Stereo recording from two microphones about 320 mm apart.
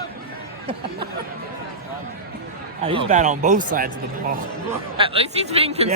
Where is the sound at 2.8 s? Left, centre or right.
Centre.